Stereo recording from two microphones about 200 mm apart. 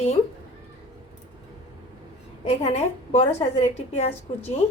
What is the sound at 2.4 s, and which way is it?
A woman's voice, 35° left (ahead or behind).